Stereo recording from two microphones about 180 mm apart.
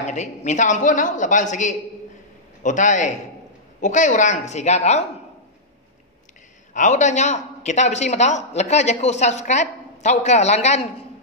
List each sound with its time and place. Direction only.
0.0 s a woman's voice: 40° left (ahead or behind)
6.7 s a man's voice: 45° left (ahead or behind)